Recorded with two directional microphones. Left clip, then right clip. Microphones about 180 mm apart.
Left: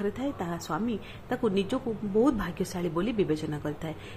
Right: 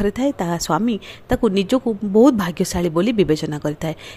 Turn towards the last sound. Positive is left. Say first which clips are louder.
# right 10 dB
turn(degrees=-55)  # may be behind; listen again after turning